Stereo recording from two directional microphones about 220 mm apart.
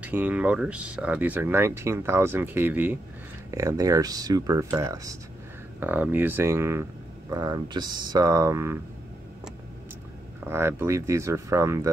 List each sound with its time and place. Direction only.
0.0 s speech: 5° right (ahead or behind)
10.4 s speech: 10° right (ahead or behind)